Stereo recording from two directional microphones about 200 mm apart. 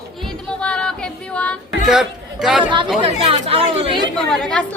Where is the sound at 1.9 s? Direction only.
Centre (ahead or behind).